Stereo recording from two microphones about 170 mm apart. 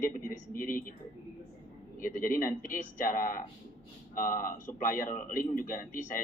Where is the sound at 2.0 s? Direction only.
55° left (ahead or behind).